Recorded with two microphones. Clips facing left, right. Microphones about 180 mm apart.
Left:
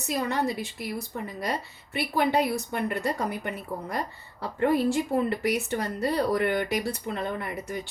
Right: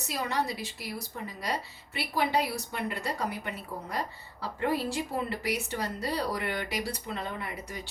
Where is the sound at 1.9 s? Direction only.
50° left (ahead or behind).